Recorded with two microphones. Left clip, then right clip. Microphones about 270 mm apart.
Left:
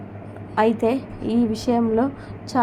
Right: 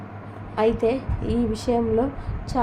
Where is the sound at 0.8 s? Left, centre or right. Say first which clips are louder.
Left 1 dB; centre.